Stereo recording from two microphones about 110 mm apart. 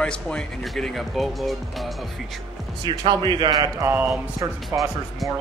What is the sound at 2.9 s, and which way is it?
A man's voice, 45° right (ahead or behind).